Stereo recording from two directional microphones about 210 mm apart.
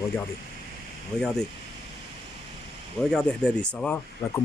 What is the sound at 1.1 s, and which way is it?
Speech, centre (ahead or behind).